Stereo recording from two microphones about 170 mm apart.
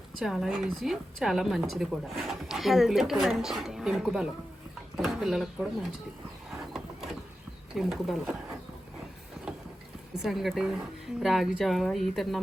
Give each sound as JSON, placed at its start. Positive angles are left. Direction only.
{"t": 0.2, "sound": "a woman's voice", "side_deg": 0}
{"t": 7.8, "sound": "a woman's voice", "side_deg": 0}
{"t": 10.2, "sound": "a woman's voice", "side_deg": 0}